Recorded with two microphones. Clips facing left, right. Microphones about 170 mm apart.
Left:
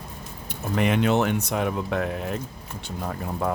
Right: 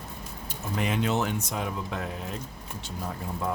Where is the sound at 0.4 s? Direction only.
65° left (ahead or behind).